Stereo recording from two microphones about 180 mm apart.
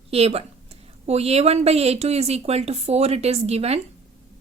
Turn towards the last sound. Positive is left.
turn(degrees=-35)  # may be behind; listen again after turning